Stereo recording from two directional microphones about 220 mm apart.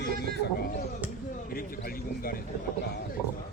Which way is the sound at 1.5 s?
40° left (ahead or behind).